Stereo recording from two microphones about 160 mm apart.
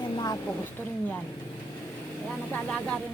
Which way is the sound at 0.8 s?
10° left (ahead or behind).